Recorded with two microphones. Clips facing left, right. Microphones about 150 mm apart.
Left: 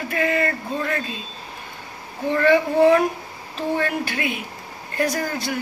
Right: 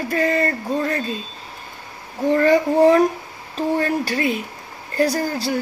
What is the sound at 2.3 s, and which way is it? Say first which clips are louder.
Speech: right 1 dB; 40° right (ahead or behind).